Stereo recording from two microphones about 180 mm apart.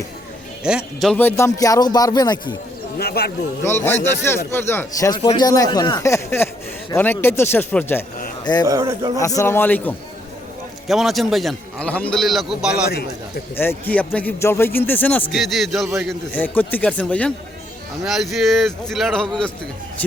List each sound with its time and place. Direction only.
0.6 s a man's voice: 5° right (ahead or behind)
1.1 s speech: 15° left (ahead or behind)
3.0 s a man's voice: 60° left (ahead or behind)
3.6 s a man's voice: 15° left (ahead or behind)
8.6 s speech: 20° right (ahead or behind)
9.2 s a man's voice: 15° left (ahead or behind); by 12.8 s 5° right (ahead or behind)
12.9 s a man's voice: 60° left (ahead or behind)
13.6 s a man's voice: 10° left (ahead or behind)
15.3 s a man's voice: centre (ahead or behind)